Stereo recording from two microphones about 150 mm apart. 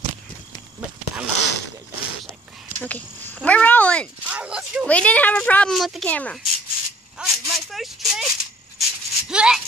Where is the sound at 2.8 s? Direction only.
10° left (ahead or behind).